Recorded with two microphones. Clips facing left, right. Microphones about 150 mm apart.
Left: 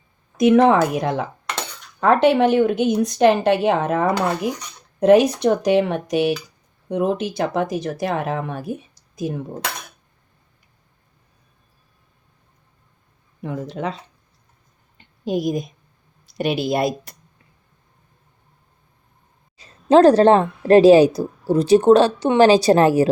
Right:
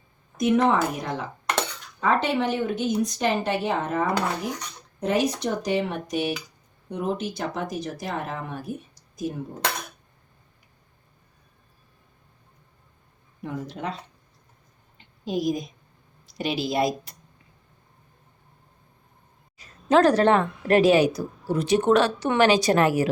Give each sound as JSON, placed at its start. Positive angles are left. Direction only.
{"t": 0.3, "sound": "speech", "side_deg": 75}
{"t": 2.0, "sound": "a woman's voice", "side_deg": 65}
{"t": 14.9, "sound": "a sound", "side_deg": 55}
{"t": 16.4, "sound": "speech", "side_deg": 60}
{"t": 19.5, "sound": "a woman's voice", "side_deg": 30}